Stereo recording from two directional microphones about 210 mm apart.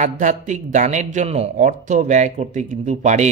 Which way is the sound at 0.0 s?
35° right (ahead or behind).